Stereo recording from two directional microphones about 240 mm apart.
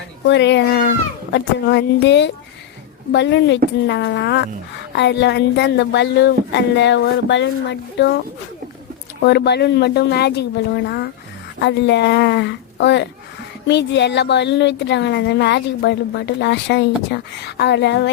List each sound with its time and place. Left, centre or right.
0.3 s speech: left
9.2 s speech: left